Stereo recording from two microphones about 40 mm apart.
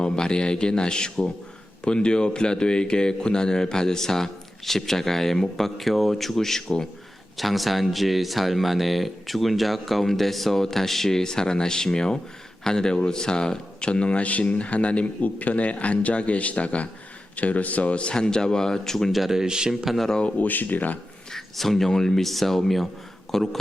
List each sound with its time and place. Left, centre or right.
0.0 s a man's voice: left
7.3 s speech: centre
19.1 s speech: centre
19.7 s speech: centre
20.4 s speech: left
21.3 s speech: centre